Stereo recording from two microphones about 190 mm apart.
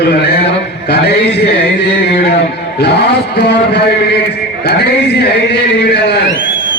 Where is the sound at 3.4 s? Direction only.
65° left (ahead or behind).